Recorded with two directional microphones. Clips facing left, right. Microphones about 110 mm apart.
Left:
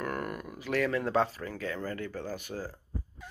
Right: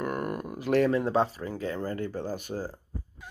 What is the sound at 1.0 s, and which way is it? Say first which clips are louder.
Speech: right 2 dB; 20° right (ahead or behind).